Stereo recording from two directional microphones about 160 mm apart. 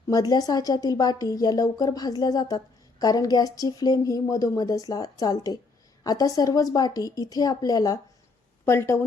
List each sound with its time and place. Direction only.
0.1 s speech: 25° left (ahead or behind)